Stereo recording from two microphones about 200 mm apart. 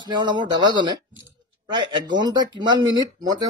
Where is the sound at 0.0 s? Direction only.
25° right (ahead or behind).